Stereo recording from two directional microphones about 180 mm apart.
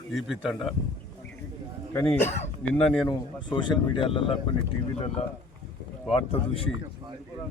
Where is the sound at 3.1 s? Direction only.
25° left (ahead or behind).